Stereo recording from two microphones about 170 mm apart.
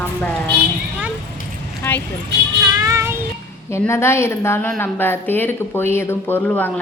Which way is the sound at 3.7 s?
15° left (ahead or behind).